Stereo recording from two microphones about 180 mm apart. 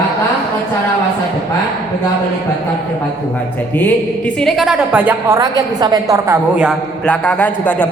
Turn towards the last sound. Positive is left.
turn(degrees=10)  # may be behind; listen again after turning